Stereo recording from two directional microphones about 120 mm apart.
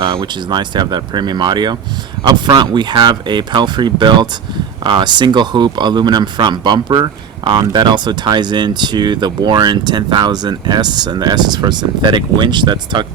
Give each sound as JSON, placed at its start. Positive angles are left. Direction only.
{"t": 0.0, "sound": "speech", "side_deg": -45}